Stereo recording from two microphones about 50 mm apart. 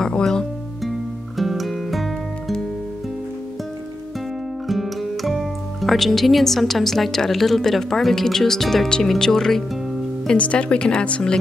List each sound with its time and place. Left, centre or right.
0.0 s music: centre
1.4 s music: centre
4.6 s speech: centre
10.3 s a woman's voice: left